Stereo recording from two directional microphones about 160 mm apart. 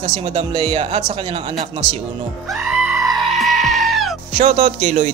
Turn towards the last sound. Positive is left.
turn(degrees=-50)  # may be behind; listen again after turning